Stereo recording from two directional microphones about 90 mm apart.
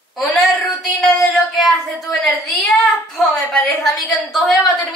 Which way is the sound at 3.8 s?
Centre (ahead or behind).